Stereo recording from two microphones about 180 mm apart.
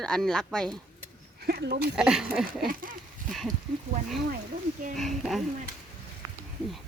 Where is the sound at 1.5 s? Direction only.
60° right (ahead or behind).